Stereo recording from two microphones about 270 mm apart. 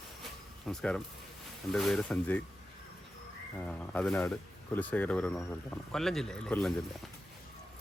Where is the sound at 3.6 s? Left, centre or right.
Centre.